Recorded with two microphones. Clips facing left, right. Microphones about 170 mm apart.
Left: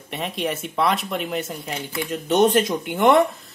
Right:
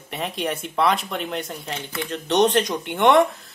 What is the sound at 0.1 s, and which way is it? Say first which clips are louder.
Speech: even; centre (ahead or behind).